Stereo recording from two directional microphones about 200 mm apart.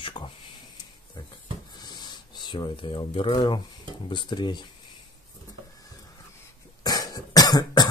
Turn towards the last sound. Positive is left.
turn(degrees=20)  # may be behind; listen again after turning